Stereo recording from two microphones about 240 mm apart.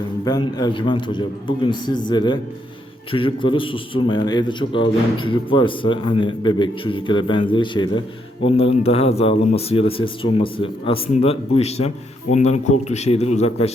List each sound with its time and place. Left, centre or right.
0.3 s a man's voice: centre